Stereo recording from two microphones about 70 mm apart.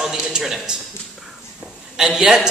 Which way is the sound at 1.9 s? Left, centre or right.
Centre.